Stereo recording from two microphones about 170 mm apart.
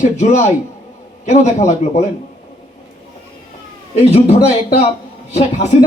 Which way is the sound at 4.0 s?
35° left (ahead or behind).